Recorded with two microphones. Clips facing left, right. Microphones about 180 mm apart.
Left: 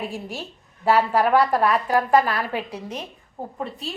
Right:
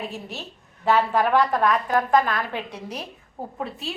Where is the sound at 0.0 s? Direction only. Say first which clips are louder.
Left 3 dB; 10° left (ahead or behind).